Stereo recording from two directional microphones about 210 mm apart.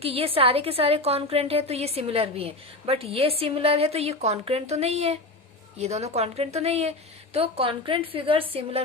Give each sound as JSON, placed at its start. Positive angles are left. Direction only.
{"t": 0.0, "sound": "a woman's voice", "side_deg": -25}